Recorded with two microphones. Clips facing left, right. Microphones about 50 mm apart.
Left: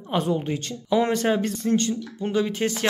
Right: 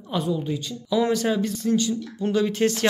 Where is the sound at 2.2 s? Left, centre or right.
Left.